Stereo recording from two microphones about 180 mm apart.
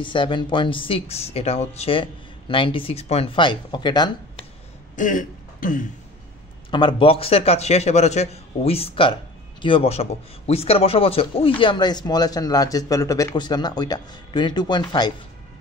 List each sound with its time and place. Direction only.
0.0 s a man's voice: 25° left (ahead or behind)
4.9 s speech: 45° left (ahead or behind)
6.7 s a man's voice: 25° left (ahead or behind)